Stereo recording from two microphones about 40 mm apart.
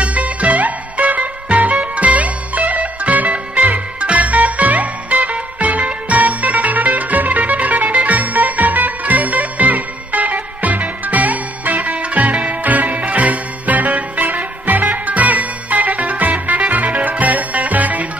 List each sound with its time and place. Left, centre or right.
0.0 s music: right